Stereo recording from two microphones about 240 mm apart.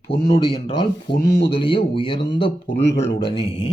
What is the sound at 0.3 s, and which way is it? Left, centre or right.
Speech, left.